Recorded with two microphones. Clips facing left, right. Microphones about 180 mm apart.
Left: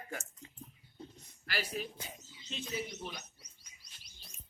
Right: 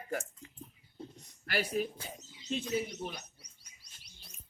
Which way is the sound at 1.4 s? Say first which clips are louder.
Right 6 dB; 55° right (ahead or behind).